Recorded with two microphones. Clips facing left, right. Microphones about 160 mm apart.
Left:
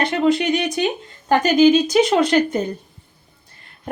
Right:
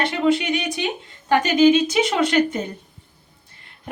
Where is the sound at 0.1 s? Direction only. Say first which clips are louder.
Left 2 dB; 40° left (ahead or behind).